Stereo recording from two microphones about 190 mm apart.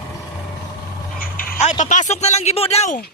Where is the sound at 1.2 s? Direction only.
50° left (ahead or behind).